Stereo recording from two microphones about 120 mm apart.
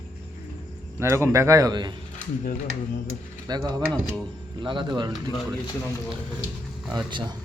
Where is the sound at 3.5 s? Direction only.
35° right (ahead or behind).